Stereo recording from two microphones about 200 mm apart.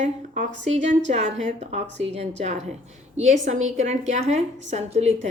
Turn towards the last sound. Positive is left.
turn(degrees=-35)  # may be behind; listen again after turning